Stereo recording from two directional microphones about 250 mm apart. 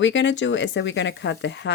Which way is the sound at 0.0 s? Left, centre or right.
Left.